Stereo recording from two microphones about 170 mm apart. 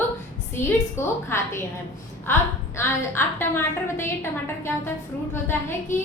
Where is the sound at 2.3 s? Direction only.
15° left (ahead or behind).